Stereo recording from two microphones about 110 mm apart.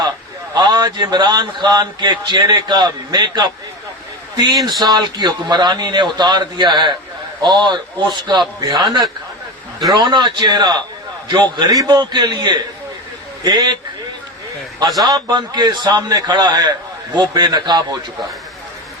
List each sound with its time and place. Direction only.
0.5 s a man's voice: 40° right (ahead or behind)
9.9 s a man's voice: 45° right (ahead or behind)
15.0 s a man's voice: 40° right (ahead or behind)